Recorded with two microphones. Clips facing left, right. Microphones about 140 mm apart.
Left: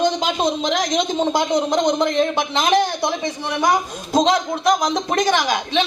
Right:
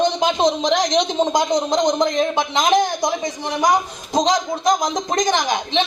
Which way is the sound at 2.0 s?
15° right (ahead or behind).